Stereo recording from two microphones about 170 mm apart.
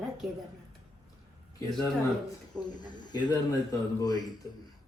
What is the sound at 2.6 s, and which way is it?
A man's voice, 25° left (ahead or behind).